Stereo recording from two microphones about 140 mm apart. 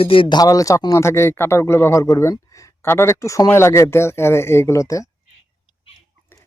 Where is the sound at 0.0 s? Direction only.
40° left (ahead or behind); by 5.0 s 20° left (ahead or behind).